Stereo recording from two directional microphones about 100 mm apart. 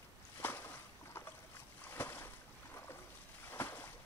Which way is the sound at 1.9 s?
25° left (ahead or behind).